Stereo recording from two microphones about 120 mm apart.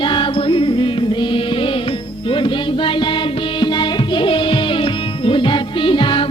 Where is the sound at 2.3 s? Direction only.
45° left (ahead or behind).